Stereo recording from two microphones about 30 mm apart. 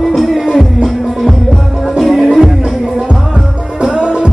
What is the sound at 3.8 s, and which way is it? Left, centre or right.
Music, right.